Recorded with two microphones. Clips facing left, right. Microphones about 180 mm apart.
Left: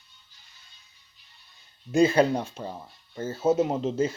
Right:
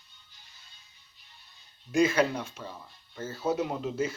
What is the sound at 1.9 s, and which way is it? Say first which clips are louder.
Speech: left 4 dB; 30° left (ahead or behind).